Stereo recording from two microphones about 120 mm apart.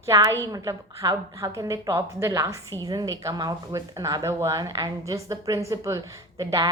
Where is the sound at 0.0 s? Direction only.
25° right (ahead or behind).